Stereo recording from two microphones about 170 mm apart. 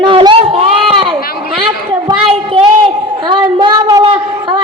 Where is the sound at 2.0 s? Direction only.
30° right (ahead or behind).